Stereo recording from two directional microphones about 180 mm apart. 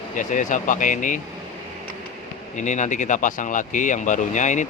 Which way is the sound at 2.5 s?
40° left (ahead or behind).